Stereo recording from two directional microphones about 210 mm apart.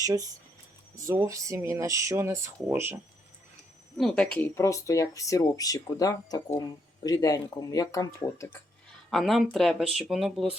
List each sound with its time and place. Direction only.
0.0 s speech: 15° right (ahead or behind)
3.9 s speech: 5° left (ahead or behind)
9.0 s speech: centre (ahead or behind)